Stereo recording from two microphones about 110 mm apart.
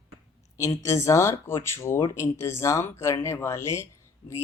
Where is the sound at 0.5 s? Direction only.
25° left (ahead or behind).